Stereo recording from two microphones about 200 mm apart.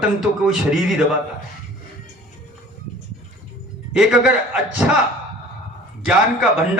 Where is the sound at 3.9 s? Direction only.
5° right (ahead or behind).